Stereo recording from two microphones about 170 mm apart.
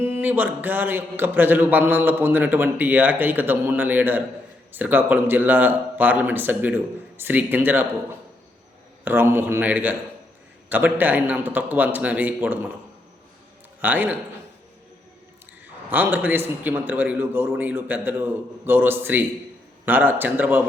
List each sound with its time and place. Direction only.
0.0 s speech: 10° right (ahead or behind)
9.0 s speech: 15° right (ahead or behind)
13.8 s speech: 10° right (ahead or behind)
15.9 s speech: 10° right (ahead or behind)